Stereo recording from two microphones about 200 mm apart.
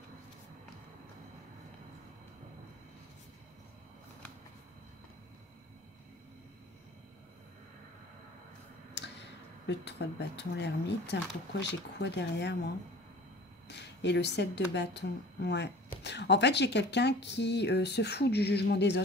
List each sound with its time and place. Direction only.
8.9 s speech: 60° left (ahead or behind)
13.7 s speech: 60° left (ahead or behind)